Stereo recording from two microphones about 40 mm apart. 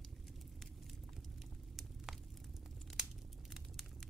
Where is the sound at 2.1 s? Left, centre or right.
Centre.